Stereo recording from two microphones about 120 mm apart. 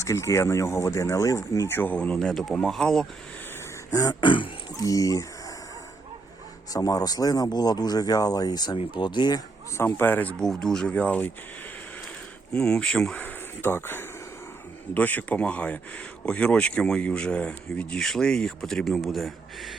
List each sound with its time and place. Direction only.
0.0 s speech: 25° left (ahead or behind); by 3.1 s 5° left (ahead or behind)
3.9 s speech: 35° left (ahead or behind)
4.8 s speech: 30° left (ahead or behind)
6.7 s speech: 30° left (ahead or behind)
9.7 s speech: 20° left (ahead or behind)
10.4 s speech: 5° left (ahead or behind)
12.5 s speech: 5° left (ahead or behind)